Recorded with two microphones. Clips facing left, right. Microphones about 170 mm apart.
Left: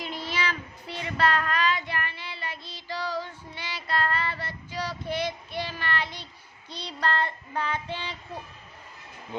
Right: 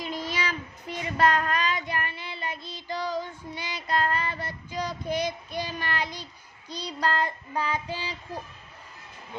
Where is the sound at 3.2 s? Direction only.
20° right (ahead or behind).